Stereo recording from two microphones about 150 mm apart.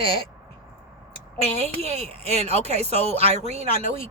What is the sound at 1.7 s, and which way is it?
Speech, 45° right (ahead or behind).